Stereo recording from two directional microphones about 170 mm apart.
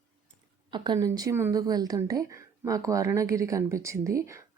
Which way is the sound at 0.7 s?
20° right (ahead or behind).